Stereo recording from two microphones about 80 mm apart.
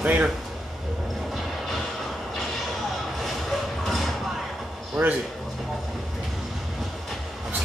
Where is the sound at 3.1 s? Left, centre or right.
Centre.